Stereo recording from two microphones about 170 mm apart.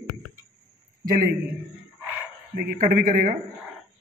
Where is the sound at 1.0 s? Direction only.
55° right (ahead or behind).